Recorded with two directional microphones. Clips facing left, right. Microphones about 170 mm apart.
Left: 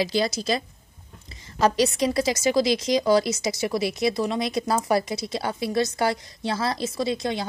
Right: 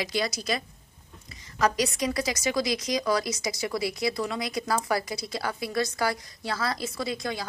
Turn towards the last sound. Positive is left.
turn(degrees=25)  # may be behind; listen again after turning